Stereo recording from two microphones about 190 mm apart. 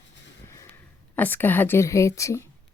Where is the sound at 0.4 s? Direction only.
15° left (ahead or behind).